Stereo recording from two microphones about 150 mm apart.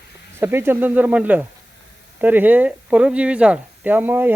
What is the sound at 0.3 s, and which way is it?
Speech, 15° right (ahead or behind).